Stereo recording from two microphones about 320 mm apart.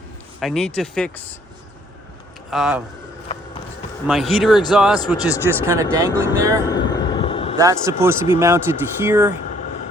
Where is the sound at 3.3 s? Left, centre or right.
Centre.